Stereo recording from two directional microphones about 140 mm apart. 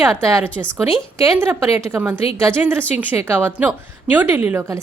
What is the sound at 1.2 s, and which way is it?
A woman's voice, 15° right (ahead or behind).